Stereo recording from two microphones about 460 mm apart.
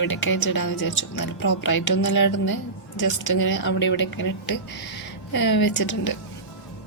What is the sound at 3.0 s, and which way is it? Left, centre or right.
Speech, left.